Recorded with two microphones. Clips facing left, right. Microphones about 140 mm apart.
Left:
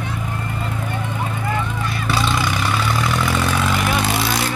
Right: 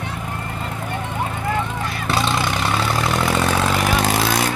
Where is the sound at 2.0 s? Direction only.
40° right (ahead or behind).